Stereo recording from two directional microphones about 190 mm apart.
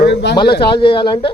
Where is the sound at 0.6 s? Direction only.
30° left (ahead or behind).